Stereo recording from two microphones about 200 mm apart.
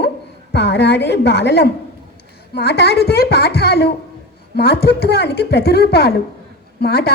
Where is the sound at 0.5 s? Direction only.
60° left (ahead or behind).